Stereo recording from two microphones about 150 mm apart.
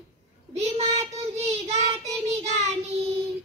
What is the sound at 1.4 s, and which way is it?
Child singing, 45° right (ahead or behind).